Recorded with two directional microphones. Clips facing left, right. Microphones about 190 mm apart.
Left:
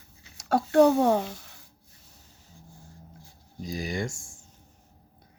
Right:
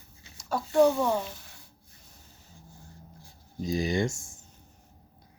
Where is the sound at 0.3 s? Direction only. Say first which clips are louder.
Left 3 dB; 70° left (ahead or behind).